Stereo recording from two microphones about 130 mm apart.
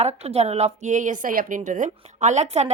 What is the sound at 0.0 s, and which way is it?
A woman's voice, 55° right (ahead or behind).